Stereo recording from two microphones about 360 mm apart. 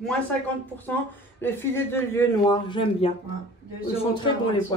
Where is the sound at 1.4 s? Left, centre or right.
Centre.